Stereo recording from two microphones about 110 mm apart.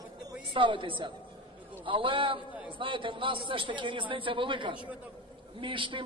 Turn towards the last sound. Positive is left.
turn(degrees=-50)  # may be behind; listen again after turning